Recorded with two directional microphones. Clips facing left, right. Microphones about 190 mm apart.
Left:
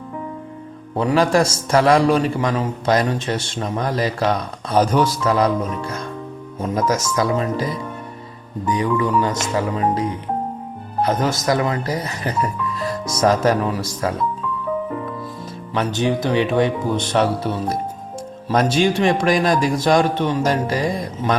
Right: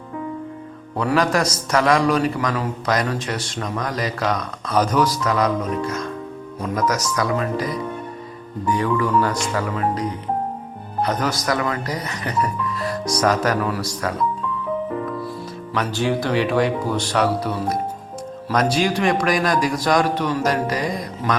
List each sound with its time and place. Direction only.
0.9 s a man's voice: 25° left (ahead or behind)
11.1 s a man's voice: 25° left (ahead or behind)
15.7 s a man's voice: 20° left (ahead or behind)